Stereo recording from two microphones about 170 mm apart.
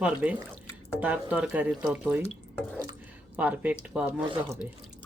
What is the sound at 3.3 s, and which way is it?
Speech, 10° right (ahead or behind).